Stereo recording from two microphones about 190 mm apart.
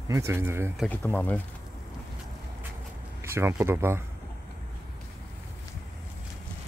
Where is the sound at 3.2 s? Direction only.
15° right (ahead or behind).